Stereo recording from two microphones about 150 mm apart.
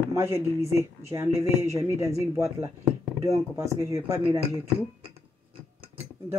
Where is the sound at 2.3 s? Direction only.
20° right (ahead or behind).